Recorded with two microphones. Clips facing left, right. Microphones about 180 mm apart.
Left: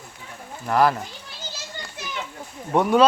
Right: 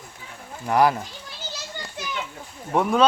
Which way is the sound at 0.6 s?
15° right (ahead or behind).